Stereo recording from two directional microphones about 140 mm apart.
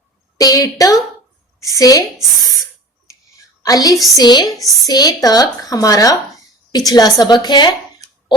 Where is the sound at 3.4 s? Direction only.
25° left (ahead or behind).